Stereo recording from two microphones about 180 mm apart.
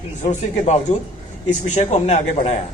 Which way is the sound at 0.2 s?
40° left (ahead or behind).